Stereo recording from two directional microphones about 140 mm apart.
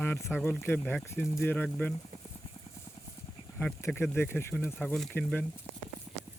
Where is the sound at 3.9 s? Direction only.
5° left (ahead or behind).